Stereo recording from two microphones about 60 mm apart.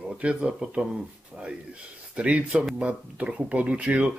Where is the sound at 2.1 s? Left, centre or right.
Right.